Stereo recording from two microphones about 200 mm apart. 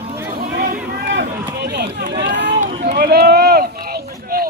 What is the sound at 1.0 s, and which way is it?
Run, 55° right (ahead or behind).